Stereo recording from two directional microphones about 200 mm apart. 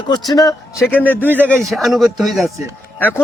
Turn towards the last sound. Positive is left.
turn(degrees=10)  # may be behind; listen again after turning